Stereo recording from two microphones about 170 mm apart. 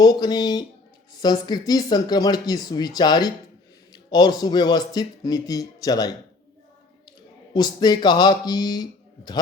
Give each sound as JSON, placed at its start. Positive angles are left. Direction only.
{"t": 0.0, "sound": "speech", "side_deg": 25}
{"t": 7.5, "sound": "speech", "side_deg": 25}